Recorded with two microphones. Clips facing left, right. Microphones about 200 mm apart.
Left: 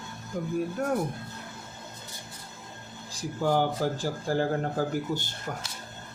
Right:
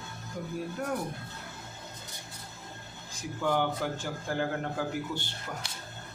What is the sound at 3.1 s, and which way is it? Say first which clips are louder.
Speech: left 3 dB; 35° left (ahead or behind).